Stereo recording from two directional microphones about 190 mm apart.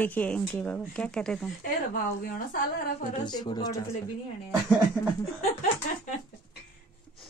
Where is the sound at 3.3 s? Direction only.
25° left (ahead or behind).